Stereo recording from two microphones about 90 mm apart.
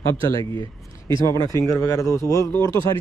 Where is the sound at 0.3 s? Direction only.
40° left (ahead or behind).